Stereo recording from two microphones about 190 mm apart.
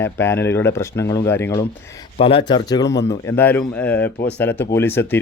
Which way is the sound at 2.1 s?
30° left (ahead or behind).